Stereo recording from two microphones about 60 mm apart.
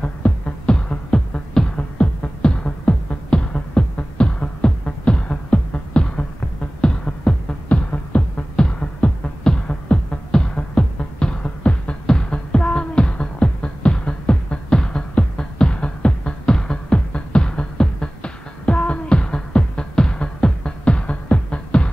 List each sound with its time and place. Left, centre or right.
0.0 s music: centre